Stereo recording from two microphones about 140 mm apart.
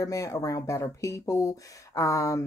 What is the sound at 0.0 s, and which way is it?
Speech, 20° left (ahead or behind).